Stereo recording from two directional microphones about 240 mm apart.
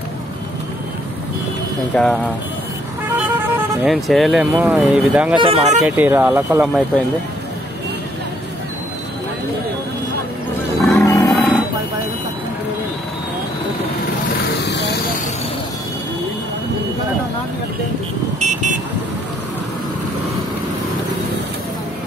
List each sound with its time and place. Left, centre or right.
1.9 s speech: centre
3.2 s speech: centre
5.4 s speech: right
5.9 s speech: centre
10.8 s music: centre
11.1 s music: centre
18.4 s vehicle: right